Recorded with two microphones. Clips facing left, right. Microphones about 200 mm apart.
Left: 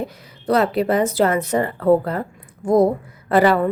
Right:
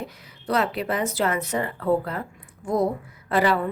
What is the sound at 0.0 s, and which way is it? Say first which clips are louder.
A woman's voice: left 7 dB; 35° left (ahead or behind).